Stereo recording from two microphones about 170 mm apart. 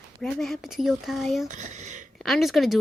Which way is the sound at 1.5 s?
45° right (ahead or behind).